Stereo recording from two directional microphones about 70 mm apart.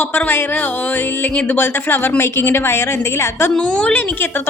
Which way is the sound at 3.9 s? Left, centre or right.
Left.